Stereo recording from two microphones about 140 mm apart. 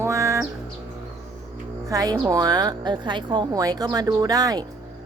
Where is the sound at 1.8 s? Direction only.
25° right (ahead or behind).